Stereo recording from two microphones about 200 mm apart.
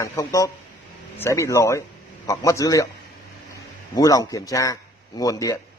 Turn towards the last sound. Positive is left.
turn(degrees=15)  # may be behind; listen again after turning